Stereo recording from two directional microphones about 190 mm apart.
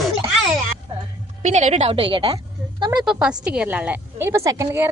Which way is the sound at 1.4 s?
40° right (ahead or behind).